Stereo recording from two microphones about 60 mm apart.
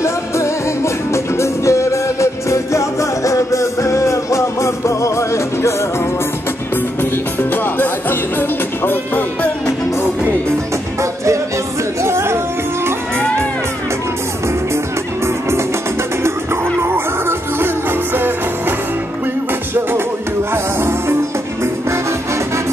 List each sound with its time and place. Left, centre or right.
0.0 s music: left
7.0 s music: left
12.0 s music: right
16.8 s music: right
20.5 s music: right